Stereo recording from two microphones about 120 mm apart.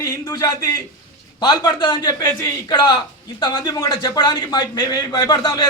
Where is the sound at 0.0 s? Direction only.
30° left (ahead or behind).